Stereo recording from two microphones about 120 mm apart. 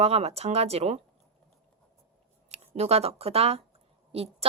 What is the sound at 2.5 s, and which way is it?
A woman's voice, 60° right (ahead or behind).